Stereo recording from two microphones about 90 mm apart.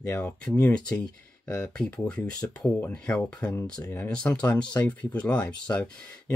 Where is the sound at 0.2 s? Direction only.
15° left (ahead or behind).